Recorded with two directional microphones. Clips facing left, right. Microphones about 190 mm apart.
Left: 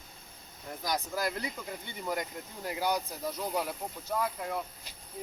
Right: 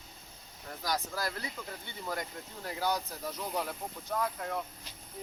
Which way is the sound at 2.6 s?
15° left (ahead or behind).